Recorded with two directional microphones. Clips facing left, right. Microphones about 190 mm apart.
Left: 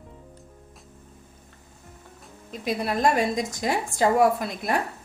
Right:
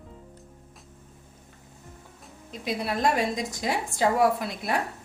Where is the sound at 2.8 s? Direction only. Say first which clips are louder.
Left 2 dB; 50° left (ahead or behind).